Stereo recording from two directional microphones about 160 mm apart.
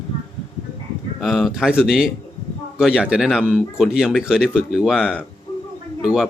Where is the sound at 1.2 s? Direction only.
Centre (ahead or behind).